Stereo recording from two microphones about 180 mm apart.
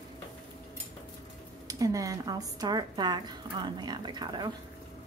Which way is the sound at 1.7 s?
20° right (ahead or behind).